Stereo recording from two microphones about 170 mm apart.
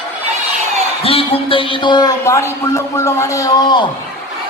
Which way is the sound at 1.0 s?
35° left (ahead or behind).